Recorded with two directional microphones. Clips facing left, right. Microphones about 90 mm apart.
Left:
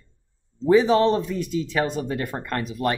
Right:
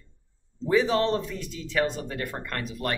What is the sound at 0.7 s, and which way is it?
Speech, 20° left (ahead or behind).